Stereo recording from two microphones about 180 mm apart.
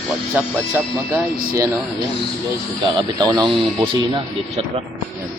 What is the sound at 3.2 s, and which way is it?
Speech, 20° right (ahead or behind).